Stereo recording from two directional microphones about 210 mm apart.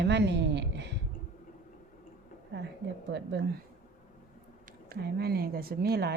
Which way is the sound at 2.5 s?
55° right (ahead or behind).